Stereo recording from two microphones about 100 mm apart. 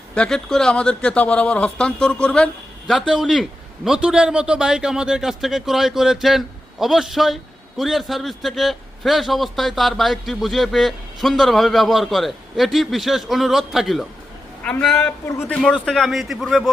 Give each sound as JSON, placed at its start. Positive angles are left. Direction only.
{"t": 0.1, "sound": "a man's voice", "side_deg": 10}
{"t": 14.6, "sound": "a man's voice", "side_deg": 10}
{"t": 15.9, "sound": "a man's voice", "side_deg": 0}